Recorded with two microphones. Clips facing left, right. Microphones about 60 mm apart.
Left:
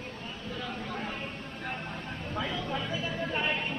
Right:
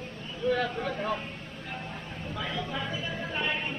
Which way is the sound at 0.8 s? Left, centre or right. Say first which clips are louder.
Right 5 dB; right.